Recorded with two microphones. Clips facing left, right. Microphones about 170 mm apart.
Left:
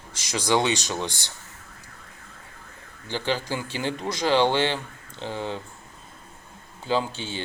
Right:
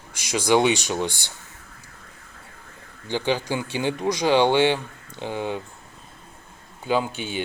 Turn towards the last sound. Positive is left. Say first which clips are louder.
# right 2 dB
turn(degrees=-15)  # may be behind; listen again after turning